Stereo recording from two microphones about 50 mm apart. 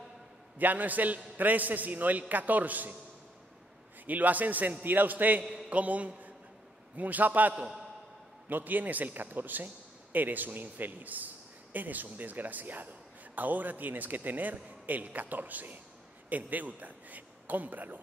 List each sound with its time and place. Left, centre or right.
0.6 s a man's voice: right
4.0 s a man's voice: right